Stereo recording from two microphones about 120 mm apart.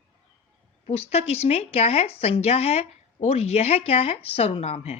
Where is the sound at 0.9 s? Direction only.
60° left (ahead or behind).